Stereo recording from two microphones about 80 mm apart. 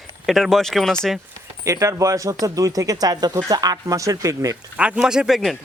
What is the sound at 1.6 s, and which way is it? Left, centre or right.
Speech, right.